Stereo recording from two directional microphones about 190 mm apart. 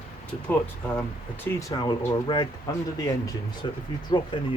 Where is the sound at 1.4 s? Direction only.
20° left (ahead or behind).